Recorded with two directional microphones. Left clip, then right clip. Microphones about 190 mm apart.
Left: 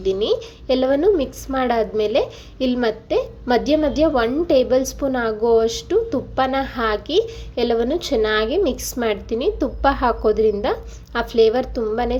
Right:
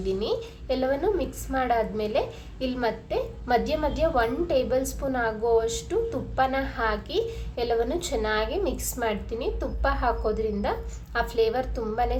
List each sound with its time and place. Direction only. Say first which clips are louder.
0.0 s a woman's voice: left 8 dB; 30° left (ahead or behind)